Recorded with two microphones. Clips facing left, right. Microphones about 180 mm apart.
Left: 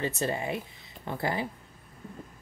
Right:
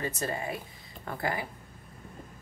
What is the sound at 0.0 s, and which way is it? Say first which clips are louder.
A woman's voice: left 3 dB; 25° left (ahead or behind).